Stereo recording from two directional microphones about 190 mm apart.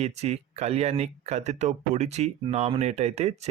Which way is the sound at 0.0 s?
35° right (ahead or behind).